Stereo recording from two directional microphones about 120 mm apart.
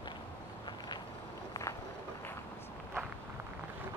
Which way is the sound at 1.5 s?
25° left (ahead or behind).